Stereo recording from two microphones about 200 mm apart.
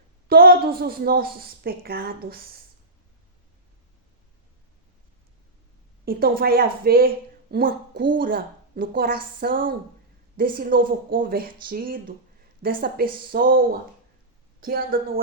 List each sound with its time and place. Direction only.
0.3 s a woman's voice: 50° right (ahead or behind)
6.1 s a woman's voice: 50° right (ahead or behind)